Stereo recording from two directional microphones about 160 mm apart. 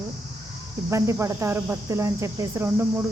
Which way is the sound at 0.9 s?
20° right (ahead or behind).